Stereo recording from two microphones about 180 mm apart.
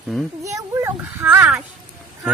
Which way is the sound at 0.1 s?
Centre (ahead or behind).